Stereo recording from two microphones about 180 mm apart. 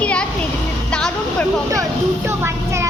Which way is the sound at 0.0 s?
5° left (ahead or behind).